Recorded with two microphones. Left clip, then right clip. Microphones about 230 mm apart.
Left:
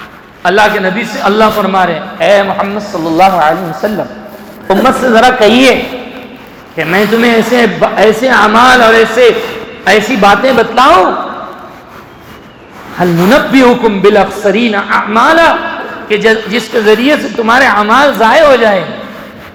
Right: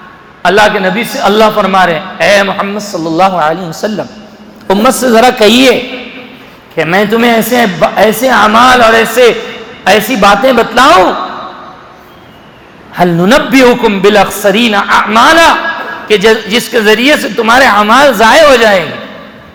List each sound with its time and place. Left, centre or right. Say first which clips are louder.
0.4 s a man's voice: right 1 dB; right
6.7 s a man's voice: right 1 dB; right
13.0 s a man's voice: right 1 dB; right